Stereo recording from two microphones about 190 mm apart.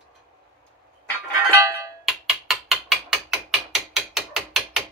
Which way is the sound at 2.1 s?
Centre (ahead or behind).